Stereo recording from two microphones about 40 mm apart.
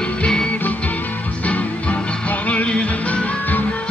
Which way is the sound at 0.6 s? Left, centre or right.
Left.